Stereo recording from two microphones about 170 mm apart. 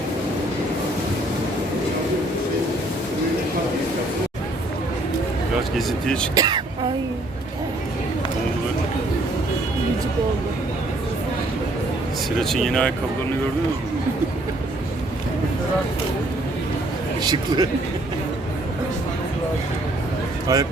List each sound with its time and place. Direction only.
5.7 s speech: 5° left (ahead or behind)
6.3 s a man's voice: 20° right (ahead or behind)
12.4 s speech: centre (ahead or behind)
17.2 s a man's voice: 25° right (ahead or behind)
20.5 s a man's voice: 20° right (ahead or behind)